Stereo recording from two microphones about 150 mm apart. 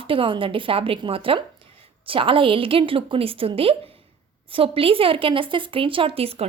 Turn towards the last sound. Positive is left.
turn(degrees=-40)  # may be behind; listen again after turning